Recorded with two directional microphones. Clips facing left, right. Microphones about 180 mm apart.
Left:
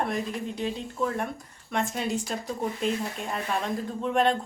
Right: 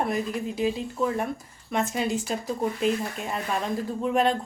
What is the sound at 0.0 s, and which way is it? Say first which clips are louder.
Speech: right 2 dB; 5° right (ahead or behind).